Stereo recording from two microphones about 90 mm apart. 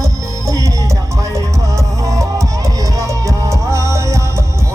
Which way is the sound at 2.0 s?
35° right (ahead or behind).